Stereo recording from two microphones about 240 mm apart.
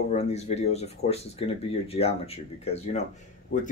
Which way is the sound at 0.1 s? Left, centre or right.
Left.